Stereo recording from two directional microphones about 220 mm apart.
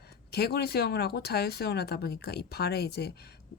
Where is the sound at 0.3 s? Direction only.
45° left (ahead or behind).